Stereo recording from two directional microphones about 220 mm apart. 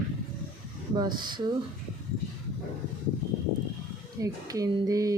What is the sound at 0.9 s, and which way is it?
Speech, 20° right (ahead or behind).